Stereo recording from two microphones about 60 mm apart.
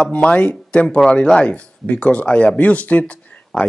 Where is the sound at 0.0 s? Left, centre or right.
Left.